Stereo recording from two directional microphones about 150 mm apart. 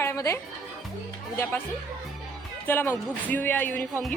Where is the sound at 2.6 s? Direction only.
15° left (ahead or behind).